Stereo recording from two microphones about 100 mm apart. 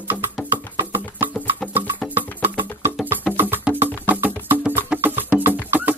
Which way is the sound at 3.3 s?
20° right (ahead or behind).